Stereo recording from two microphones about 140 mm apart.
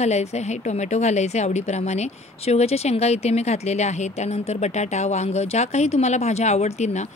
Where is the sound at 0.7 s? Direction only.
55° left (ahead or behind).